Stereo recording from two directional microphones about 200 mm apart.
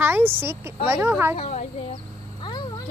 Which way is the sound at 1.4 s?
30° left (ahead or behind).